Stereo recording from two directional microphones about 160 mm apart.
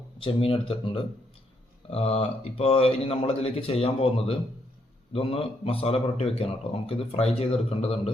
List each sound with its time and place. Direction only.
0.2 s a man's voice: 35° left (ahead or behind)